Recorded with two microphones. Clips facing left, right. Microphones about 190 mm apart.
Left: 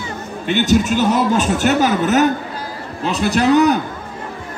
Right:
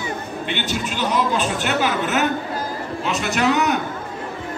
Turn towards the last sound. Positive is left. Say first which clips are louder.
# left 6 dB
turn(degrees=35)  # may be behind; listen again after turning